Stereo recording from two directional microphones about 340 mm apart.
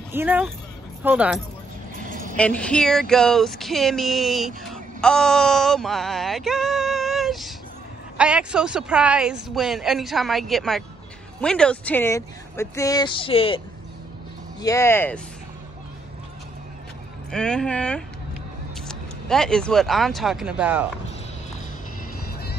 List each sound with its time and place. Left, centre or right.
0.1 s speech: centre
2.0 s a sound: right
2.3 s speech: centre
14.6 s speech: centre
17.3 s speech: centre